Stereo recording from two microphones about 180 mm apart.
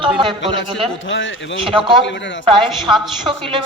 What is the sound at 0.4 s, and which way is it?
Speech, 90° left.